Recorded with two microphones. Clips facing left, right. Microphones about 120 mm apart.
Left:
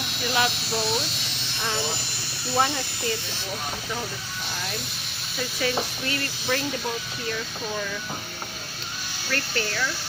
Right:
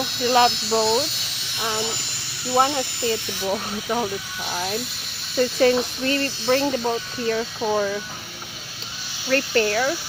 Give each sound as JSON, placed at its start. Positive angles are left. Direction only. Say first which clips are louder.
{"t": 0.0, "sound": "a sound", "louder": "right 7 dB", "side_deg": 0}
{"t": 0.3, "sound": "speech", "louder": "right 8 dB", "side_deg": -35}
{"t": 1.5, "sound": "speech", "louder": "right 3 dB", "side_deg": -20}
{"t": 3.5, "sound": "speech", "louder": "right 7 dB", "side_deg": -45}
{"t": 9.3, "sound": "speech", "louder": "right 9 dB", "side_deg": -45}